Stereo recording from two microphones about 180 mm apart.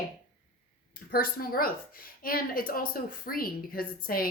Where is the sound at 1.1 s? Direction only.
55° left (ahead or behind).